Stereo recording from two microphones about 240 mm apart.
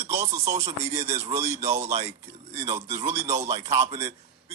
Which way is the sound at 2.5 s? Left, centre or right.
Right.